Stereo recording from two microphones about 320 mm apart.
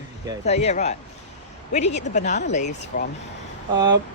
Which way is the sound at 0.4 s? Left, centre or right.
Centre.